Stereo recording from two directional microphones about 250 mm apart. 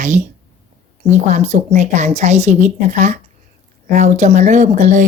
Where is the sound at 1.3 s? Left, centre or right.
Right.